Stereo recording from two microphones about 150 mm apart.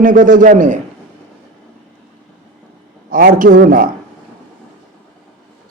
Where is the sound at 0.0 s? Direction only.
60° right (ahead or behind).